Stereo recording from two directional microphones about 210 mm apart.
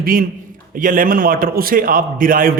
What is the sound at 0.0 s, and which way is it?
A man's voice, 45° right (ahead or behind).